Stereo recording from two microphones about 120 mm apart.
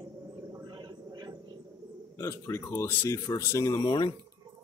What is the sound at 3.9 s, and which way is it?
Speech, 40° left (ahead or behind).